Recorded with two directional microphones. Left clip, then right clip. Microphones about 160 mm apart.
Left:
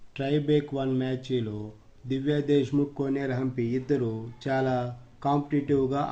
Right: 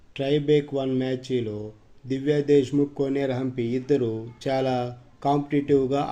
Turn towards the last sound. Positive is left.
turn(degrees=-15)  # may be behind; listen again after turning